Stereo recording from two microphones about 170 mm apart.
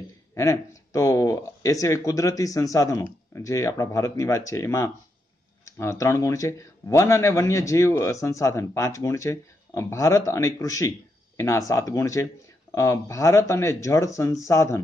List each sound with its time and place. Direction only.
0.3 s speech: 15° left (ahead or behind)